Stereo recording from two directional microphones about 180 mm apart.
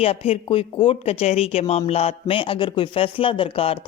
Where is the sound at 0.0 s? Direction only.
30° left (ahead or behind).